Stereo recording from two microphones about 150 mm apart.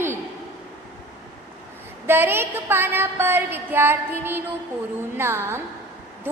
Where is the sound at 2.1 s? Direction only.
15° right (ahead or behind).